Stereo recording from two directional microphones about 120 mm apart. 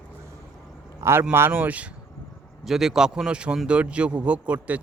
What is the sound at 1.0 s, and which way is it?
A man's voice, 20° right (ahead or behind).